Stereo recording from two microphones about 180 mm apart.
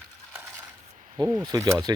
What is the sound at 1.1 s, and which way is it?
Speech, 20° right (ahead or behind).